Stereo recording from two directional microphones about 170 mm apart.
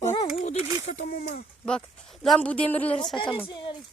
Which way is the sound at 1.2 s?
60° left (ahead or behind).